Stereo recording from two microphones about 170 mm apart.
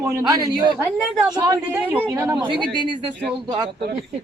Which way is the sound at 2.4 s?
30° right (ahead or behind).